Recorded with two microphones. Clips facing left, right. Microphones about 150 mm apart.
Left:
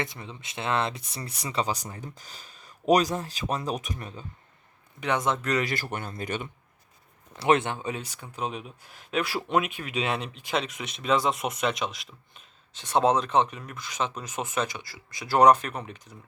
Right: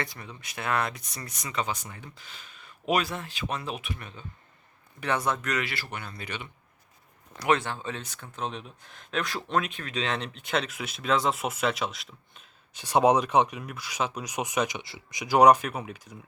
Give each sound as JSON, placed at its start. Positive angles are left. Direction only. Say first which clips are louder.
{"t": 0.0, "sound": "speech", "louder": "left 2 dB", "side_deg": 25}
{"t": 4.9, "sound": "speech", "louder": "left 1 dB", "side_deg": 20}
{"t": 7.3, "sound": "speech", "louder": "left 3 dB", "side_deg": 25}
{"t": 12.7, "sound": "speech", "louder": "right 1 dB", "side_deg": -10}